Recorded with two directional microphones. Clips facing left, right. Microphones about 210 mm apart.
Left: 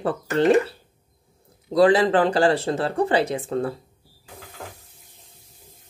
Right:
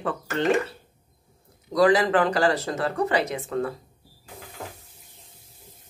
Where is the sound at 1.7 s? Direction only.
30° left (ahead or behind).